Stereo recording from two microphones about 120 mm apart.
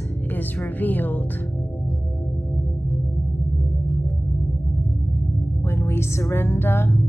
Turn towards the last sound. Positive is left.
turn(degrees=20)  # may be behind; listen again after turning